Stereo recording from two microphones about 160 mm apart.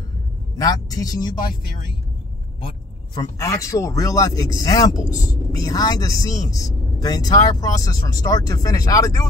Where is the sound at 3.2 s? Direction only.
20° left (ahead or behind).